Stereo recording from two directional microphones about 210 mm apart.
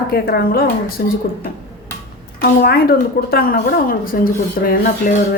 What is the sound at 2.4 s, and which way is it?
A woman's voice, 45° left (ahead or behind).